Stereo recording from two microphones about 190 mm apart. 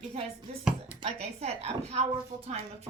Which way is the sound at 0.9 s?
30° right (ahead or behind).